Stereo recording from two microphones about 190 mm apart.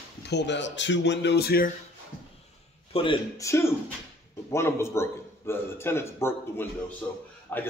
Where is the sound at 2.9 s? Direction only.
30° left (ahead or behind).